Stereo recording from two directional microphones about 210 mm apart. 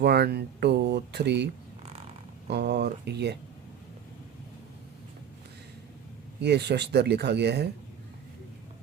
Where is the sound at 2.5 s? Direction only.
55° right (ahead or behind).